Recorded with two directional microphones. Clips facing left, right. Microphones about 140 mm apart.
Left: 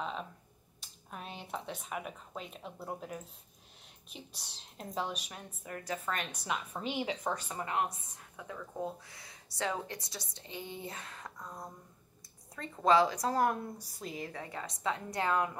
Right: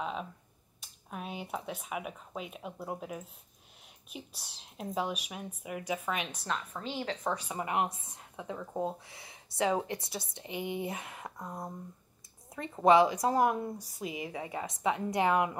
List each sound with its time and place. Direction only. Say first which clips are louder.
0.0 s finger snapping: right 2 dB; 5° right (ahead or behind)
0.7 s speech: right 4 dB; 5° right (ahead or behind)
6.4 s a woman's voice: even; 15° left (ahead or behind)
7.2 s a woman's voice: right 2 dB; 10° right (ahead or behind)